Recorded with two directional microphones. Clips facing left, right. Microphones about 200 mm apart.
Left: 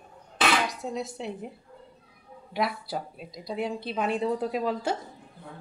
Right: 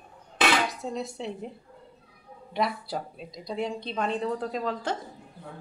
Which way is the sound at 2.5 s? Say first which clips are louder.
Even; 5° left (ahead or behind).